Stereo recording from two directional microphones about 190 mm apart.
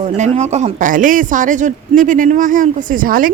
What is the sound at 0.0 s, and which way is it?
Speech, 35° right (ahead or behind).